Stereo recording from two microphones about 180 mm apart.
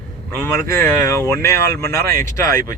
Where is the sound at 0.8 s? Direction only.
15° left (ahead or behind).